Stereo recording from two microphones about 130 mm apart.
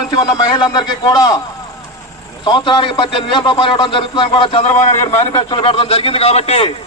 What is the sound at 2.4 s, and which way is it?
A man's voice, 40° left (ahead or behind).